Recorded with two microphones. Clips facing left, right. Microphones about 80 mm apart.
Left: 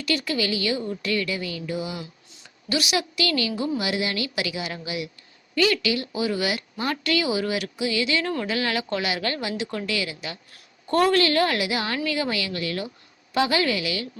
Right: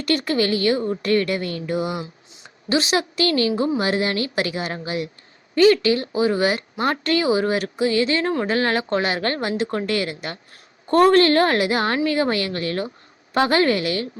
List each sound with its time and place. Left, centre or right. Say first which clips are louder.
0.0 s a woman's voice: right 5 dB; right
2.4 s a woman's voice: right 5 dB; right